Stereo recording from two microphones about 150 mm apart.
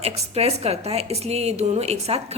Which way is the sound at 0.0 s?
45° right (ahead or behind).